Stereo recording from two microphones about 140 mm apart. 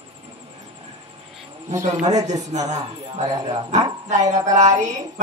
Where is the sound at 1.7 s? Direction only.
60° right (ahead or behind).